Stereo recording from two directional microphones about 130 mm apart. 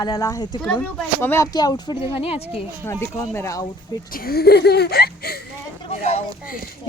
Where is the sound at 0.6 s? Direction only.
10° left (ahead or behind).